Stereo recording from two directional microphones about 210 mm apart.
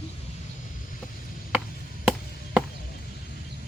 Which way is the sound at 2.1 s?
5° right (ahead or behind).